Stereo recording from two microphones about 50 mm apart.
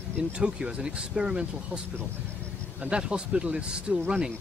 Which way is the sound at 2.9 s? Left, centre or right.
Centre.